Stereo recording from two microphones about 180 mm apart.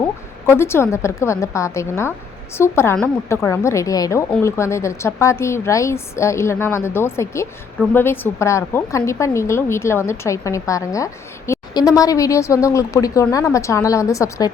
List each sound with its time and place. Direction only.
0.0 s speech: 15° left (ahead or behind)